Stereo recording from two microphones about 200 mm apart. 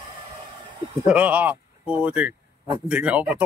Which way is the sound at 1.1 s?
5° right (ahead or behind).